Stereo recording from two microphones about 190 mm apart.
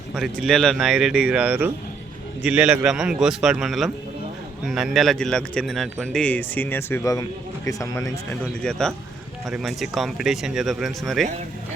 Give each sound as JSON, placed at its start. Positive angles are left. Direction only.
{"t": 0.1, "sound": "a man's voice", "side_deg": 0}
{"t": 9.5, "sound": "a man's voice", "side_deg": 0}